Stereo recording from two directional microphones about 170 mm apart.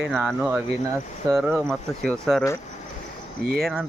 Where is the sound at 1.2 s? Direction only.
25° right (ahead or behind).